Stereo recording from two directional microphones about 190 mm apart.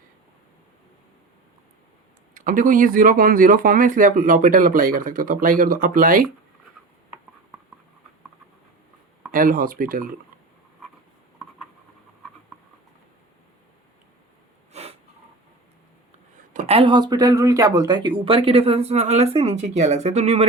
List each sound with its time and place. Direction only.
2.3 s speech: 45° right (ahead or behind)
9.3 s speech: 45° right (ahead or behind)
14.7 s snort: 35° right (ahead or behind)
16.5 s speech: 35° right (ahead or behind)